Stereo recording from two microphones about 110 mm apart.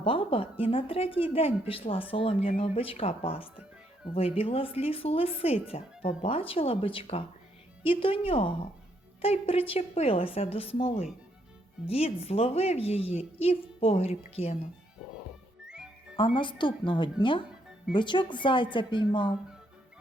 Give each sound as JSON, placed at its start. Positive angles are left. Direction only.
{"t": 0.0, "sound": "speech", "side_deg": 55}
{"t": 15.6, "sound": "music", "side_deg": -5}
{"t": 16.1, "sound": "a woman's voice", "side_deg": 50}